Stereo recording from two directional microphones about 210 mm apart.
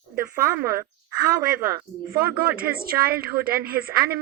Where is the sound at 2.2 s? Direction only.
45° right (ahead or behind).